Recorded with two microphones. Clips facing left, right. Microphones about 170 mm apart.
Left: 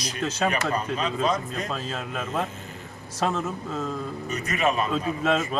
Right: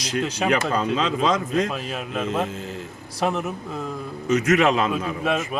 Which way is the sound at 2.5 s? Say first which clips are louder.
Right 8 dB; 90° right.